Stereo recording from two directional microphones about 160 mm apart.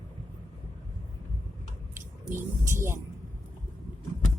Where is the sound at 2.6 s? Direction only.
15° right (ahead or behind).